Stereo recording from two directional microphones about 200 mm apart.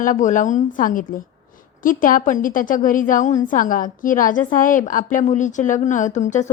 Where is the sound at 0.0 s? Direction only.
40° left (ahead or behind).